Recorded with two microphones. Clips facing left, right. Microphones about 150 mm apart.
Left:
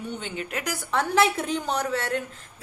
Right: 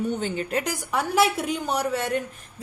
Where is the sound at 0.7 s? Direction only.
10° right (ahead or behind).